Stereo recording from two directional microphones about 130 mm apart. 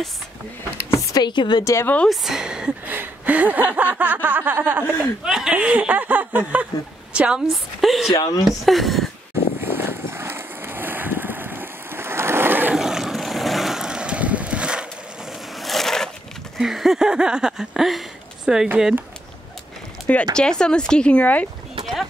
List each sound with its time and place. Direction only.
0.8 s a sound: 30° left (ahead or behind)
1.6 s speech: 20° left (ahead or behind)
2.0 s speech: centre (ahead or behind)
4.8 s speech: 15° left (ahead or behind)
5.2 s speech: 5° right (ahead or behind)
8.1 s speech: 30° left (ahead or behind)
8.6 s speech: centre (ahead or behind)
9.6 s vehicle: 15° right (ahead or behind)
12.7 s vehicle: 5° right (ahead or behind)
15.6 s crushing: centre (ahead or behind)
16.5 s a sound: centre (ahead or behind)
20.3 s speech: 5° left (ahead or behind)